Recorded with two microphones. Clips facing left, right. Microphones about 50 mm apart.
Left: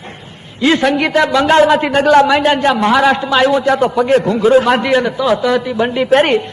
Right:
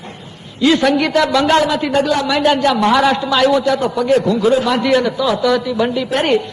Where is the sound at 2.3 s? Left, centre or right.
Left.